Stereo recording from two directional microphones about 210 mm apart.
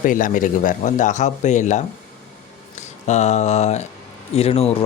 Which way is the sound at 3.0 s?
30° left (ahead or behind).